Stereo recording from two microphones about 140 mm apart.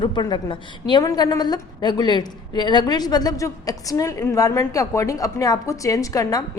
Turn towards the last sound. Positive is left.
turn(degrees=25)  # may be behind; listen again after turning